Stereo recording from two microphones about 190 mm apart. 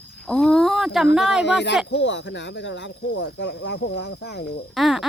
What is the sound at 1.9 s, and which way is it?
Speech, 65° left (ahead or behind).